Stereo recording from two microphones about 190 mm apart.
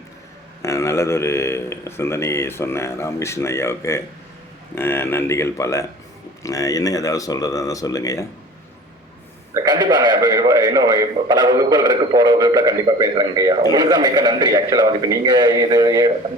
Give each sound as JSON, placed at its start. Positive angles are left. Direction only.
{"t": 0.6, "sound": "a man's voice", "side_deg": 15}
{"t": 9.6, "sound": "a man's voice", "side_deg": -20}